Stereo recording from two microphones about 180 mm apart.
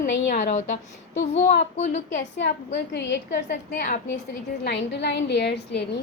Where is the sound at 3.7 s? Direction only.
45° left (ahead or behind).